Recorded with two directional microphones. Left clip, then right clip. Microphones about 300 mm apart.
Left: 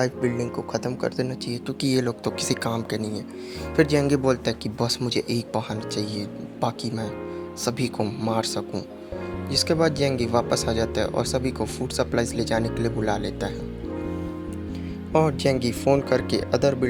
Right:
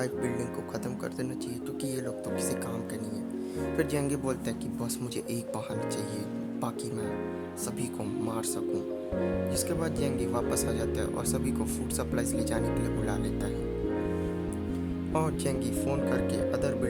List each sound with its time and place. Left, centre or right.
0.0 s speech: right
1.8 s speech: right
7.6 s speech: right
15.1 s speech: right